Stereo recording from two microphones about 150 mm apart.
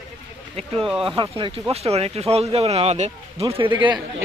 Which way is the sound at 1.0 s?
35° right (ahead or behind).